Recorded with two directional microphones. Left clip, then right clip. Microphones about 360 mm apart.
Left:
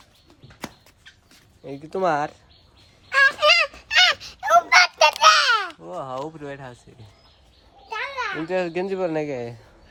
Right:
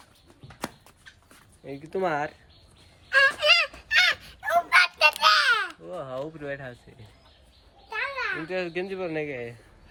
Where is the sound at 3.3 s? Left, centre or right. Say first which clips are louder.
Left 4 dB; centre.